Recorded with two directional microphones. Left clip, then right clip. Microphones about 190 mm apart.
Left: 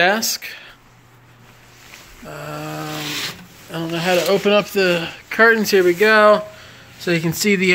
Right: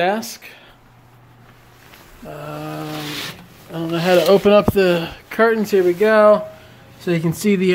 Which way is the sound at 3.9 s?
20° right (ahead or behind).